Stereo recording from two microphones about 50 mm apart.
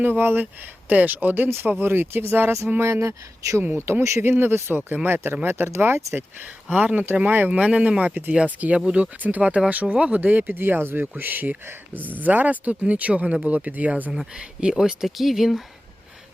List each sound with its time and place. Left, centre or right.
0.0 s speech: right
0.9 s speech: right
2.7 s speech: right
4.2 s speech: right
5.6 s speech: right
6.7 s speech: right
7.3 s speech: right
10.2 s speech: right
10.6 s speech: right
14.1 s speech: centre